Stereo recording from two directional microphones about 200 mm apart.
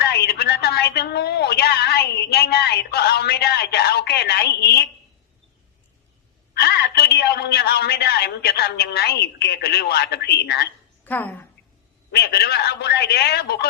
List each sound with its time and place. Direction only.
0.0 s a woman's voice: 55° left (ahead or behind)
6.5 s a woman's voice: 55° left (ahead or behind)
11.0 s a woman's voice: 10° left (ahead or behind)
12.1 s a man's voice: 55° left (ahead or behind)